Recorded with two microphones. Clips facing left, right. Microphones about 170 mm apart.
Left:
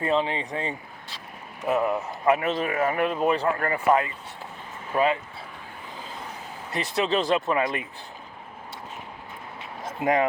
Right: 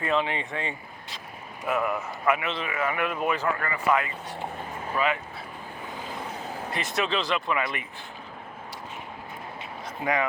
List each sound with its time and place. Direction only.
0.0 s speech: 30° left (ahead or behind)
3.8 s speech: 25° left (ahead or behind)
6.7 s speech: 35° left (ahead or behind)
7.2 s speech: 45° left (ahead or behind)
9.8 s a sound: 45° left (ahead or behind)